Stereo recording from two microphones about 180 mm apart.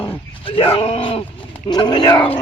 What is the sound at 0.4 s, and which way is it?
Speech, 30° left (ahead or behind).